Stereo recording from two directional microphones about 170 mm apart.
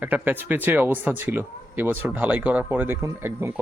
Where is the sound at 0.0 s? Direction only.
10° right (ahead or behind).